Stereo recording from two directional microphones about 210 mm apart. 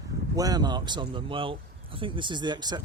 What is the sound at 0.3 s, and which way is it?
Speech, 20° right (ahead or behind).